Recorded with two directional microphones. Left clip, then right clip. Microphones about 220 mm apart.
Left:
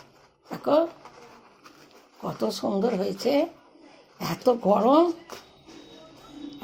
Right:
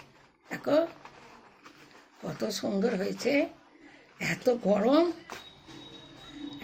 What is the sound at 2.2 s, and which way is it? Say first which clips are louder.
A woman's voice: left 5 dB; 20° left (ahead or behind).